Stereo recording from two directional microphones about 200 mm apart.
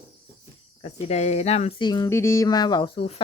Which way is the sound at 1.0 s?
35° left (ahead or behind).